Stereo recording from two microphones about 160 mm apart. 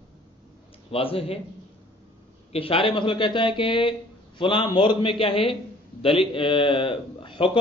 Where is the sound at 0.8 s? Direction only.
35° left (ahead or behind).